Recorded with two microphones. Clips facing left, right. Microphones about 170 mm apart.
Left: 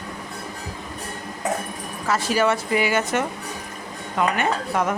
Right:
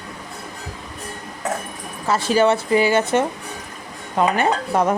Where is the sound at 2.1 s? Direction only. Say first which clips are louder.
Right 4 dB; 30° right (ahead or behind).